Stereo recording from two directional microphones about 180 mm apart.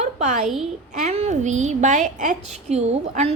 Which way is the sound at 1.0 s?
35° right (ahead or behind).